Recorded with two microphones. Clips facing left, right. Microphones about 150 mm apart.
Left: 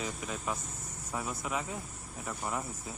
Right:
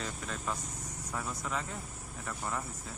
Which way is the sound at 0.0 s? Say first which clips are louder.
Left 2 dB; 10° left (ahead or behind).